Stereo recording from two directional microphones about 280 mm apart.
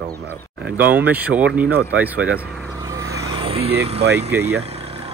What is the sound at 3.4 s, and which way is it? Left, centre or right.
Vehicle, centre.